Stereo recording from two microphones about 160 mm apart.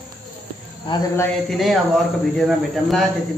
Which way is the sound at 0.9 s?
30° left (ahead or behind).